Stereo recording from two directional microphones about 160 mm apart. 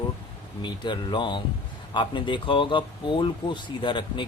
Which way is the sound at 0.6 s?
30° left (ahead or behind).